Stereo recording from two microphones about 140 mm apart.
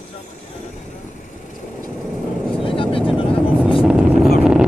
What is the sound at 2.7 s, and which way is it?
Vehicle, 40° left (ahead or behind).